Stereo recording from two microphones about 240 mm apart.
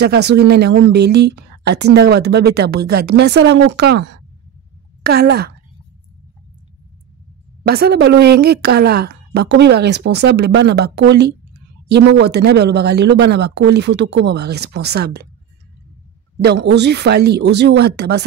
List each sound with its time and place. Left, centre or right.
0.0 s speech: right
5.0 s a woman's voice: right
7.6 s speech: right
16.3 s speech: right